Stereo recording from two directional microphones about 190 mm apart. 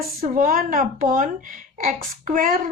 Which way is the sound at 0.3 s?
50° right (ahead or behind).